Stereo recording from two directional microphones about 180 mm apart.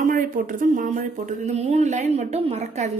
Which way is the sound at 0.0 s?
50° right (ahead or behind).